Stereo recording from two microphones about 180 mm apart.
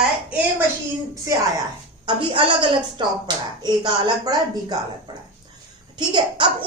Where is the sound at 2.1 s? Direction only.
30° right (ahead or behind).